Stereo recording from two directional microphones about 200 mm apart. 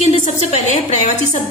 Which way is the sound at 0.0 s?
35° left (ahead or behind).